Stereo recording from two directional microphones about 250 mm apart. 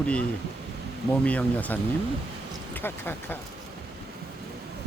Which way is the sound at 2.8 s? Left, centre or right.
Centre.